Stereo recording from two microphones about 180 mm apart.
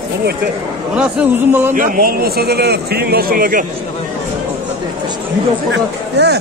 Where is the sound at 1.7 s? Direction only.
50° right (ahead or behind).